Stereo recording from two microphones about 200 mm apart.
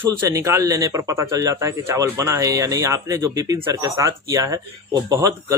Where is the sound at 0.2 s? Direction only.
15° right (ahead or behind).